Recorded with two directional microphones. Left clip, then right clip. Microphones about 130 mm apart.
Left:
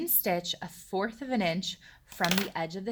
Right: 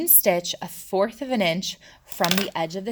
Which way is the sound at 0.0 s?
45° right (ahead or behind).